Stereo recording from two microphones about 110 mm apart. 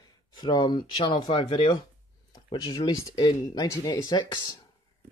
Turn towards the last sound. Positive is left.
turn(degrees=35)  # may be behind; listen again after turning